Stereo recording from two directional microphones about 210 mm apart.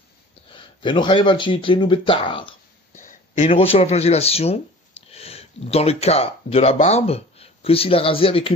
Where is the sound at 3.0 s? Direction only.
35° left (ahead or behind).